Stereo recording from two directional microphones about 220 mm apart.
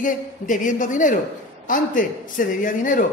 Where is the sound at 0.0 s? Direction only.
35° left (ahead or behind).